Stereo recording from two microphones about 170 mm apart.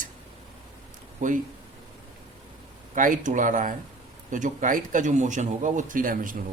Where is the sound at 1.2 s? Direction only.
50° right (ahead or behind).